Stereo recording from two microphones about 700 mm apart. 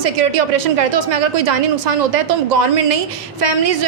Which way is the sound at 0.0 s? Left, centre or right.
Right.